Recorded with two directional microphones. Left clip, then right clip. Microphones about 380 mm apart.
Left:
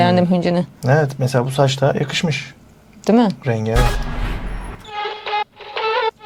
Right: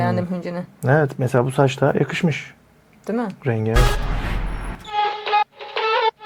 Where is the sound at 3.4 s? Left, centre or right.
Right.